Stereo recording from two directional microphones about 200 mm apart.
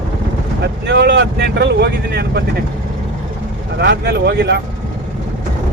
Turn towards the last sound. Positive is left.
turn(degrees=-55)  # may be behind; listen again after turning